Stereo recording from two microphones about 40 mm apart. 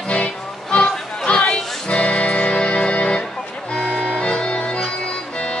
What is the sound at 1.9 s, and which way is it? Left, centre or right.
Music, left.